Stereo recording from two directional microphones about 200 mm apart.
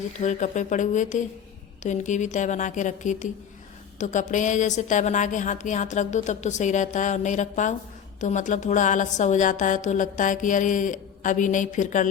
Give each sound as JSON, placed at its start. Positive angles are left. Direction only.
{"t": 0.2, "sound": "a woman's voice", "side_deg": 35}